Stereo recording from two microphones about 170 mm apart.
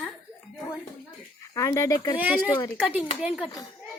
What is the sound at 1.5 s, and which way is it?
Speech, 20° left (ahead or behind).